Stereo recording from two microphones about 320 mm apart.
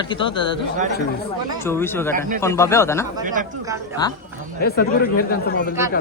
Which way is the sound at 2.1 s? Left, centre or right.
Right.